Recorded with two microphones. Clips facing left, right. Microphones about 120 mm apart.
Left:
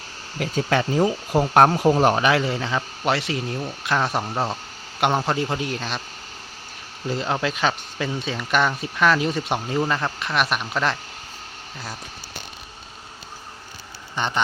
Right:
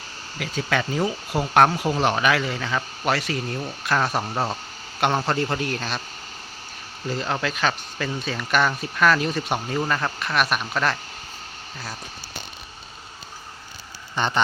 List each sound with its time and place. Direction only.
0.3 s speech: 35° left (ahead or behind)
2.1 s speech: 25° left (ahead or behind)
4.2 s speech: 5° right (ahead or behind)
4.9 s a man's voice: 10° left (ahead or behind)
7.1 s a man's voice: 15° left (ahead or behind)
14.2 s a man's voice: 15° left (ahead or behind)